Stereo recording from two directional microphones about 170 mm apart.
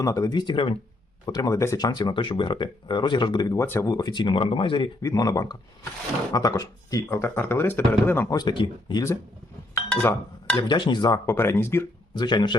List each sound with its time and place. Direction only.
0.0 s speech: 20° left (ahead or behind)
8.4 s speech: 25° left (ahead or behind)
9.9 s speech: 10° left (ahead or behind)
10.6 s speech: 25° left (ahead or behind)
11.3 s speech: 15° left (ahead or behind)
12.1 s speech: 25° left (ahead or behind)